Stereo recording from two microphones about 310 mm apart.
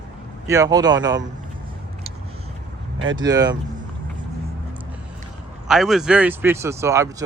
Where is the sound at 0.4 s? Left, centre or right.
Centre.